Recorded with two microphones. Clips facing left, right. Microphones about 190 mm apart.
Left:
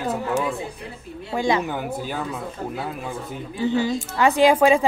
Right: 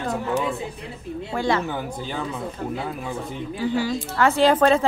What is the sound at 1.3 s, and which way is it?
Speech, 15° left (ahead or behind).